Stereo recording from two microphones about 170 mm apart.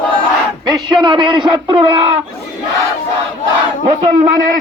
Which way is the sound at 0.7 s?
25° right (ahead or behind).